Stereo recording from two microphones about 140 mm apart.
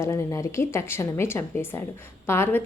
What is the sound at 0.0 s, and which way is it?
A woman's voice, 20° left (ahead or behind).